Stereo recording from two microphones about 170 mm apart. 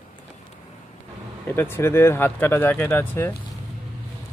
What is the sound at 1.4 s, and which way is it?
Speech, 15° left (ahead or behind).